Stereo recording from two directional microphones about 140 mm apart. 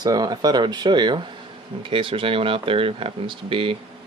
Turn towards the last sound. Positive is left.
turn(degrees=-40)  # may be behind; listen again after turning